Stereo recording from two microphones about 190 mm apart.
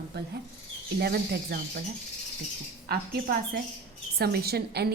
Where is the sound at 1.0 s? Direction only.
55° right (ahead or behind).